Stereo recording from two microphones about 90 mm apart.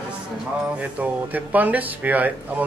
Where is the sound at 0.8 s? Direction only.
15° right (ahead or behind).